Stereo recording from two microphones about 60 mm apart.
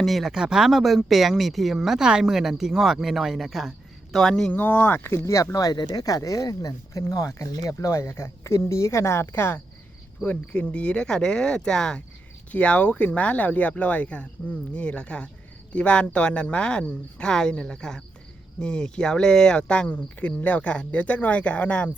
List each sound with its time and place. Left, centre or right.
0.0 s speech: centre
4.5 s speech: left
5.1 s speech: left
5.9 s speech: left
10.2 s speech: centre